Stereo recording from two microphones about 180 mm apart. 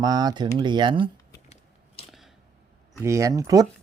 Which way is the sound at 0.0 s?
20° right (ahead or behind).